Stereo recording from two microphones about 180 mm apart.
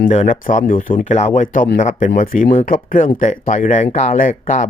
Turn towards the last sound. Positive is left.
turn(degrees=45)  # may be behind; listen again after turning